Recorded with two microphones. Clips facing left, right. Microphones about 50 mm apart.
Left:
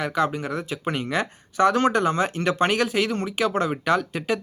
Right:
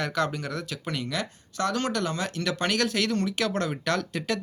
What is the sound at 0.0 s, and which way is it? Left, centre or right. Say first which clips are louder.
Speech: left 4 dB; centre.